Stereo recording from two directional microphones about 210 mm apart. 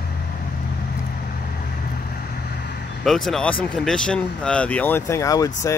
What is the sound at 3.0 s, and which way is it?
Speech, centre (ahead or behind).